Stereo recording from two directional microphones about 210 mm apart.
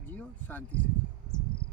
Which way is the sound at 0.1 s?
10° left (ahead or behind).